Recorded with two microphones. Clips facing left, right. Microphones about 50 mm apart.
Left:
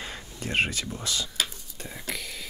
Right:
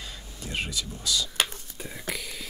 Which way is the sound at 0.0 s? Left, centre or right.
Left.